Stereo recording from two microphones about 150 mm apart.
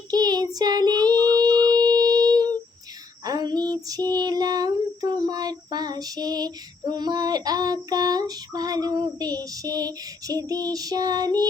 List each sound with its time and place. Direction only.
0.1 s child singing: 25° right (ahead or behind)
3.2 s a sound: 25° right (ahead or behind)
3.8 s child singing: 25° right (ahead or behind)